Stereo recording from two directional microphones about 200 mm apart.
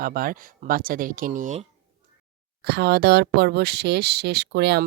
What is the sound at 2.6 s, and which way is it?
Speech, 55° right (ahead or behind).